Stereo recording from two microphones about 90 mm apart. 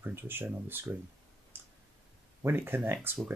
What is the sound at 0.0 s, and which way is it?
Speech, 25° right (ahead or behind).